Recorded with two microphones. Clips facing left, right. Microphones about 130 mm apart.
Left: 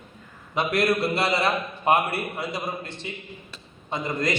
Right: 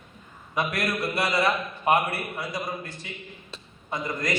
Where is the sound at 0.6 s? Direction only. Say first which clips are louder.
Left 5 dB; 25° left (ahead or behind).